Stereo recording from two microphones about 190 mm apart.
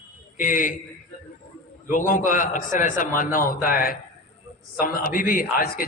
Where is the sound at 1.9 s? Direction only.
45° left (ahead or behind).